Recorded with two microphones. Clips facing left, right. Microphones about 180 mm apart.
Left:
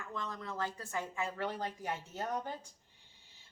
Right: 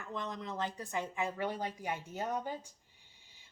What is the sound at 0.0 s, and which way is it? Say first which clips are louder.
A woman's voice: right 2 dB; 20° right (ahead or behind).